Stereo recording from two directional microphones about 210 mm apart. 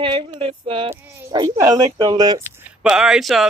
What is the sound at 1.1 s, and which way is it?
Speech, 15° right (ahead or behind).